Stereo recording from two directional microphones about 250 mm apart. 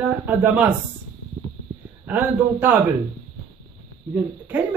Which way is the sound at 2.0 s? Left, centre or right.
Centre.